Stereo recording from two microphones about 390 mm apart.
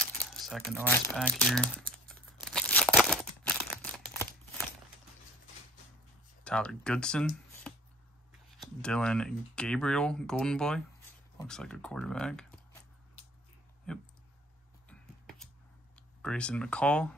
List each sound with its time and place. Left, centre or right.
0.5 s crumpling: centre
6.4 s speech: centre
13.9 s speech: centre
14.9 s music: centre
16.2 s speech: centre